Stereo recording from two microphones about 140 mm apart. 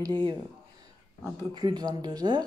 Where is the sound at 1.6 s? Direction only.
30° right (ahead or behind).